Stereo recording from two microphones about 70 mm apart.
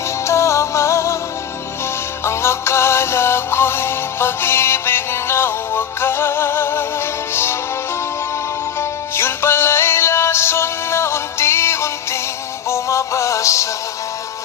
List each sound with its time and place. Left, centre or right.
0.3 s music: left
2.2 s music: left
8.8 s music: left